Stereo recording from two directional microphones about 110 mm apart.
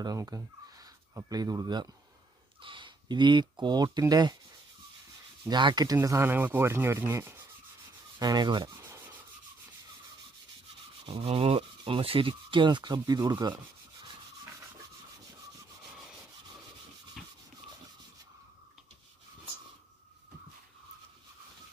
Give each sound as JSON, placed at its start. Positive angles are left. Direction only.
{"t": 0.0, "sound": "speech", "side_deg": -35}
{"t": 5.5, "sound": "rub", "side_deg": -45}
{"t": 5.9, "sound": "rub", "side_deg": -25}
{"t": 8.2, "sound": "rub", "side_deg": -40}
{"t": 11.1, "sound": "speech", "side_deg": -60}
{"t": 17.2, "sound": "a sound", "side_deg": 0}